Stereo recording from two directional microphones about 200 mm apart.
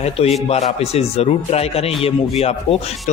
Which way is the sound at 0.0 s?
30° left (ahead or behind).